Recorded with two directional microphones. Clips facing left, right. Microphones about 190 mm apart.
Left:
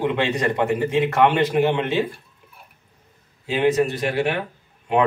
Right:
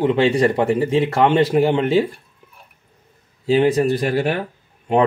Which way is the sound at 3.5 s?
35° right (ahead or behind).